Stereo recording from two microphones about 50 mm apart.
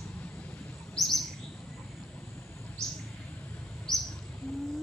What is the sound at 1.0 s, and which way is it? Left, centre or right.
Chirp, centre.